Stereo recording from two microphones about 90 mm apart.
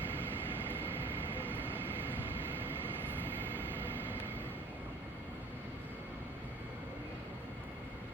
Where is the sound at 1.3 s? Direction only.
20° right (ahead or behind).